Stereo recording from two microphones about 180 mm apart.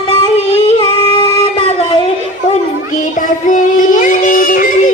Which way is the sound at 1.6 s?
35° left (ahead or behind).